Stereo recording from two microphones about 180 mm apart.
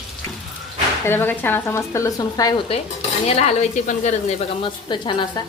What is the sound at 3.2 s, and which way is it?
Speech, 35° left (ahead or behind).